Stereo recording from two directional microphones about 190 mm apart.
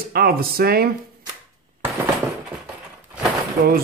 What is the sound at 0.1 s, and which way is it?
Speech, 55° right (ahead or behind).